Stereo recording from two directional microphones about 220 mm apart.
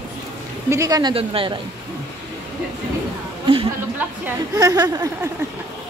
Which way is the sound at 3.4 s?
25° right (ahead or behind).